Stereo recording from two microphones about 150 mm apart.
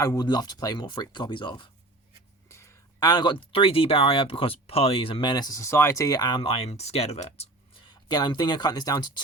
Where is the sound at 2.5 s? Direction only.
20° left (ahead or behind).